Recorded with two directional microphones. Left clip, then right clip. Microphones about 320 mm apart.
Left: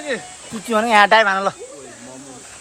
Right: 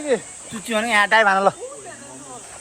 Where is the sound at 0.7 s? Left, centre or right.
Centre.